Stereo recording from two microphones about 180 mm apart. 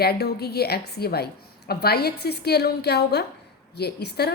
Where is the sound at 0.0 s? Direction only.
65° left (ahead or behind).